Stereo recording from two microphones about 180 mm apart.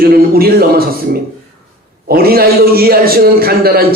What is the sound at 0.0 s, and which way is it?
A man's voice, 55° right (ahead or behind).